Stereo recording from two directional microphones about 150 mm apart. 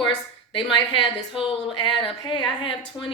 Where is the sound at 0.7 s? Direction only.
35° left (ahead or behind).